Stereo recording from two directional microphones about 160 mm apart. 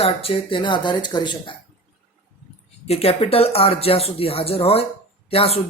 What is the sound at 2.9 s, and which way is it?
Speech, 40° left (ahead or behind).